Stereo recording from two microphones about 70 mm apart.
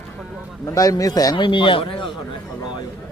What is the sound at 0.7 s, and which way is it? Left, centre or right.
Speech, left.